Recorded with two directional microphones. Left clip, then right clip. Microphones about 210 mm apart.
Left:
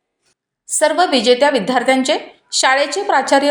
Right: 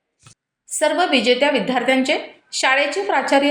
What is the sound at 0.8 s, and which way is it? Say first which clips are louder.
A woman's voice: left 3 dB; 25° left (ahead or behind).